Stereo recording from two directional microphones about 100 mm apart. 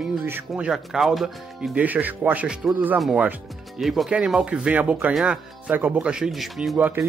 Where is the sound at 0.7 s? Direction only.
5° right (ahead or behind).